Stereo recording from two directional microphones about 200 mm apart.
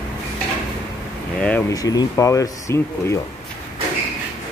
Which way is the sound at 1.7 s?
20° left (ahead or behind).